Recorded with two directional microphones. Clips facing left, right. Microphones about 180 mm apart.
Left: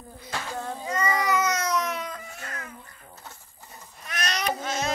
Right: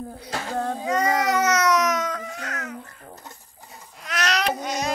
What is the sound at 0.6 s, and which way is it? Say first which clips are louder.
Baby cry: right 7 dB; 70° right (ahead or behind).